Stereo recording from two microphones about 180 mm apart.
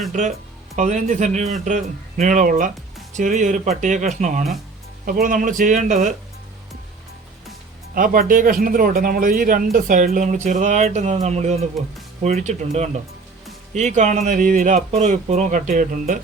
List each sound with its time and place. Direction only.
0.1 s speech: 40° right (ahead or behind)
7.9 s speech: 50° right (ahead or behind)